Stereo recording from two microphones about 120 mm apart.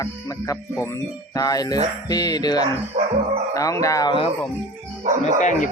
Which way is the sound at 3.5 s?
25° left (ahead or behind).